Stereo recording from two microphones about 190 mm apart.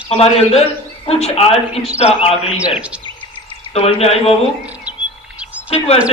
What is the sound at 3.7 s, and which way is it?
Speech, 30° left (ahead or behind).